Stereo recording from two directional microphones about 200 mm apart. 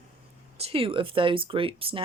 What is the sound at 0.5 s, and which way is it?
A woman's voice, 30° right (ahead or behind).